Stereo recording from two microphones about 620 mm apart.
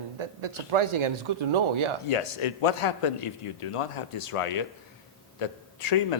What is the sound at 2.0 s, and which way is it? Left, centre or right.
A man's voice, left.